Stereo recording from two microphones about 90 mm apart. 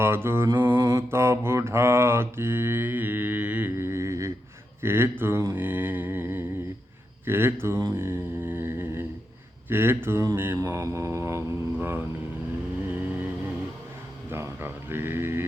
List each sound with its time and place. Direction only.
0.0 s mantra: 25° right (ahead or behind)
3.8 s a sound: 30° right (ahead or behind)
4.8 s mantra: 25° right (ahead or behind)
7.9 s humming: 25° right (ahead or behind)
9.6 s mantra: 25° right (ahead or behind)
10.6 s mantra: 35° right (ahead or behind)
12.9 s vehicle: 20° right (ahead or behind)
14.3 s a sound: 25° right (ahead or behind)